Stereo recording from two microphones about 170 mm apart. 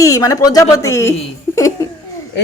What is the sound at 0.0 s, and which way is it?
Speech, 20° left (ahead or behind).